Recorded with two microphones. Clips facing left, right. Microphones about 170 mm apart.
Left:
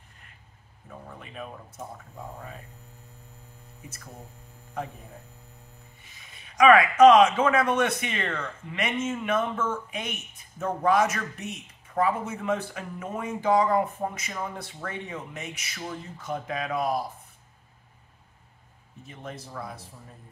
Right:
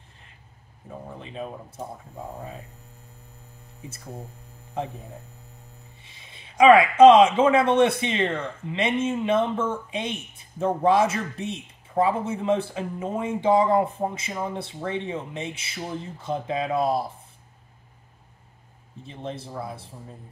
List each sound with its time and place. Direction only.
0.8 s speech: 25° right (ahead or behind)
6.0 s speech: 25° right (ahead or behind)
19.0 s speech: 30° right (ahead or behind)